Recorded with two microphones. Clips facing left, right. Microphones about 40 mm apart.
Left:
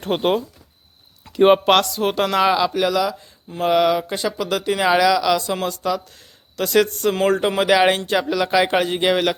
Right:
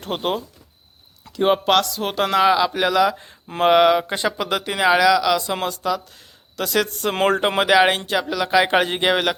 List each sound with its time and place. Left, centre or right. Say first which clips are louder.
0.0 s speech: left 4 dB; centre
1.4 s speech: left 4 dB; centre
2.7 s speech: right 1 dB; centre
3.1 s speech: right 3 dB; right
3.7 s speech: right 2 dB; right; by 5.5 s centre
6.1 s a sound: even; centre
7.1 s speech: even; right
7.7 s a man's voice: even; centre